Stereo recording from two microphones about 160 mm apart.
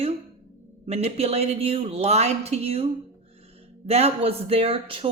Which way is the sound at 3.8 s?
40° right (ahead or behind).